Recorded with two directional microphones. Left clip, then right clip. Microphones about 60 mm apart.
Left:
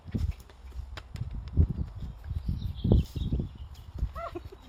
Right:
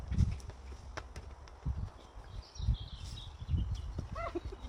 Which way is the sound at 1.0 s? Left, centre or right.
Left.